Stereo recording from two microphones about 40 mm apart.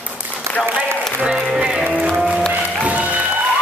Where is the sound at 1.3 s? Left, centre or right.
Centre.